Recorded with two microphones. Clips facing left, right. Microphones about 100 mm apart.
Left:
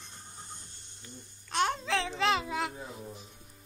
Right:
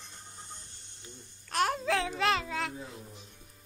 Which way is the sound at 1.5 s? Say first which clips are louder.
Right 1 dB; 5° right (ahead or behind).